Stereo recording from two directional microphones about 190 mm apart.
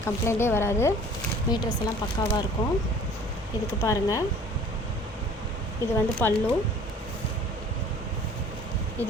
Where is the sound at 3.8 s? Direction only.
15° left (ahead or behind).